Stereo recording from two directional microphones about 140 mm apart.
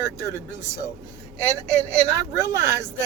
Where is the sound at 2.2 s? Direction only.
20° right (ahead or behind).